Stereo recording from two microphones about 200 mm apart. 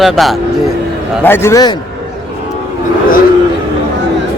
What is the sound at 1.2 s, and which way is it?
Speech, 10° left (ahead or behind).